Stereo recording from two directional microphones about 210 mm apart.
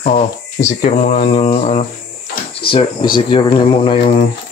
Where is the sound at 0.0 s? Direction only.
35° left (ahead or behind).